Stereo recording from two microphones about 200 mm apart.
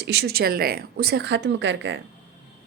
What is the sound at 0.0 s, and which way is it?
Speech, 55° right (ahead or behind).